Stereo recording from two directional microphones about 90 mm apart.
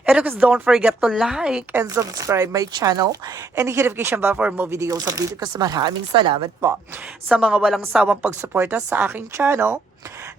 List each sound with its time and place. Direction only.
0.0 s speech: 15° right (ahead or behind)
1.7 s speech: 30° right (ahead or behind)
3.5 s speech: 30° right (ahead or behind)
4.7 s speech: 40° right (ahead or behind)
6.1 s a woman's voice: 75° right (ahead or behind)
7.3 s speech: 10° right (ahead or behind)
8.3 s speech: 25° right (ahead or behind)